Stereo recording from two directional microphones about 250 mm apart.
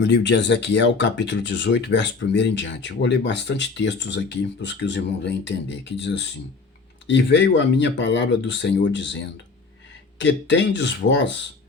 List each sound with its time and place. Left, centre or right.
0.0 s speech: left